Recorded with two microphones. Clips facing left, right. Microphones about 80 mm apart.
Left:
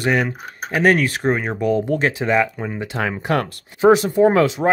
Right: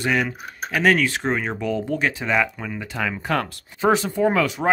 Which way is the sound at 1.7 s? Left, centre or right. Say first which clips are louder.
Left 6 dB; left.